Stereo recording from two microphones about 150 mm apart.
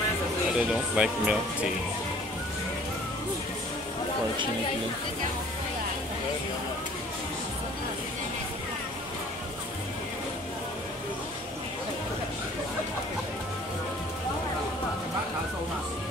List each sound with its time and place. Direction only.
0.6 s speech: 5° right (ahead or behind)